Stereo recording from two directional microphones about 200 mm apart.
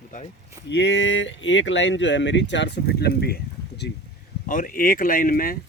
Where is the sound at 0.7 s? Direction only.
60° left (ahead or behind).